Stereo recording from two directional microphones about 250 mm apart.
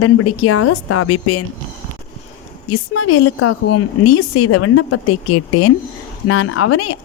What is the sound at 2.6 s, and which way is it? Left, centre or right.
A woman's voice, left.